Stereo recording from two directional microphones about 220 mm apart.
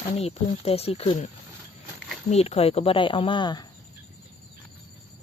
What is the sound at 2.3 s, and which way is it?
Speech, 30° left (ahead or behind).